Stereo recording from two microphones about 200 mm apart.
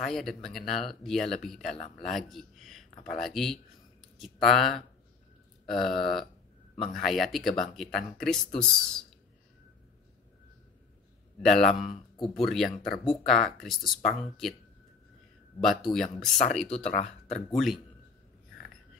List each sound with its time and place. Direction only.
0.0 s speech: centre (ahead or behind)
11.4 s speech: centre (ahead or behind)
15.6 s speech: centre (ahead or behind)
16.9 s speech: 35° left (ahead or behind)
17.5 s speech: centre (ahead or behind)